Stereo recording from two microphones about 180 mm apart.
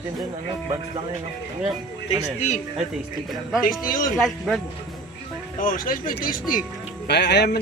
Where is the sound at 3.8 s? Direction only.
50° left (ahead or behind).